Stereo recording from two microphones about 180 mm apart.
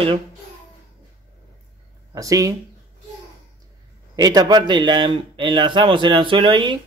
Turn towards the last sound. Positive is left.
turn(degrees=-25)  # may be behind; listen again after turning